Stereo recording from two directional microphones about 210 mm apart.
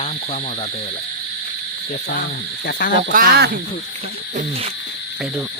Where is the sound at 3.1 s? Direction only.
45° right (ahead or behind).